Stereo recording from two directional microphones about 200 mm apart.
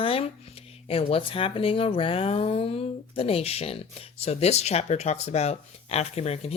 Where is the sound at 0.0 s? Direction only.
30° left (ahead or behind).